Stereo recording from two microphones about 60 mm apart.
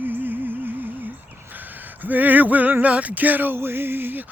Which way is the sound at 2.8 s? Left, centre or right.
Right.